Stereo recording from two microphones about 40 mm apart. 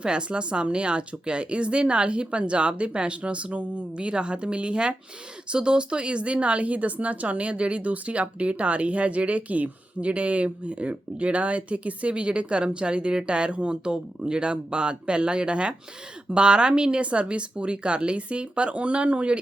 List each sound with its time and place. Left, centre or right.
0.0 s a woman's voice: right